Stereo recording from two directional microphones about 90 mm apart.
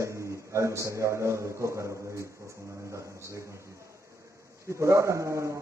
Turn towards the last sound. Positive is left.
turn(degrees=-35)  # may be behind; listen again after turning